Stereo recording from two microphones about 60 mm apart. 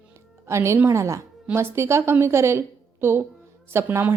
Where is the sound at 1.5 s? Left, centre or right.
Right.